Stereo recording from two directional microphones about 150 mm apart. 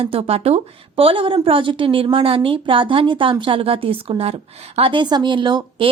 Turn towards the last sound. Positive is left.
turn(degrees=-35)  # may be behind; listen again after turning